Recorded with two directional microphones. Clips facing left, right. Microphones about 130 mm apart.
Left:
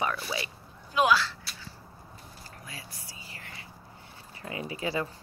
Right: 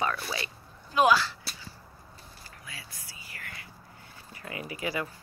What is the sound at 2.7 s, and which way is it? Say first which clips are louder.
Whispering: left 1 dB; 35° left (ahead or behind).